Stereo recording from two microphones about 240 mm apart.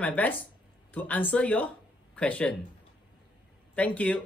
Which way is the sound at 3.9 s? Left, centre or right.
Centre.